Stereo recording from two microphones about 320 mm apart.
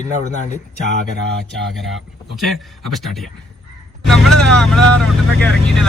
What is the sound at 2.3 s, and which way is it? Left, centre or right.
Speech, centre.